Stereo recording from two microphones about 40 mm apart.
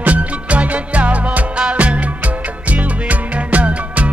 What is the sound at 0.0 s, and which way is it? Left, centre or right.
Music, right.